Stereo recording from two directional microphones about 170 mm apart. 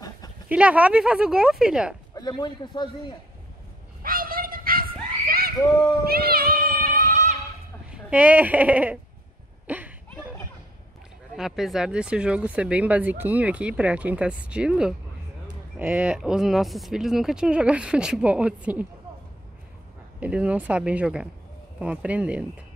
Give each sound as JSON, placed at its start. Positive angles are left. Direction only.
{"t": 0.5, "sound": "speech", "side_deg": -10}
{"t": 2.1, "sound": "a man's voice", "side_deg": 25}
{"t": 4.0, "sound": "a sound", "side_deg": -55}
{"t": 6.0, "sound": "music", "side_deg": -65}
{"t": 7.9, "sound": "speech", "side_deg": -10}
{"t": 9.7, "sound": "a sound", "side_deg": -10}
{"t": 11.3, "sound": "speech", "side_deg": 0}
{"t": 20.2, "sound": "speech", "side_deg": -5}